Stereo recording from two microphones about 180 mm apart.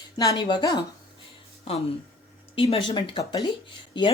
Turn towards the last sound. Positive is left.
turn(degrees=25)  # may be behind; listen again after turning